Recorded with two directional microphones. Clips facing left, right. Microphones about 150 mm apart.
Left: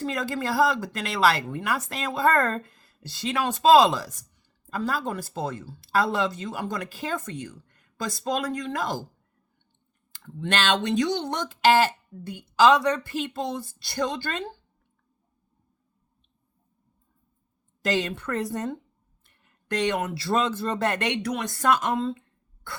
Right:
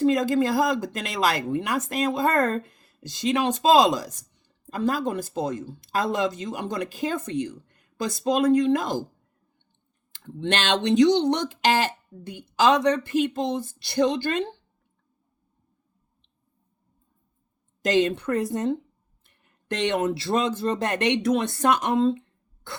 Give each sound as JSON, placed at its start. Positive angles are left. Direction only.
{"t": 0.0, "sound": "speech", "side_deg": -20}
{"t": 10.2, "sound": "speech", "side_deg": -20}
{"t": 17.8, "sound": "speech", "side_deg": -20}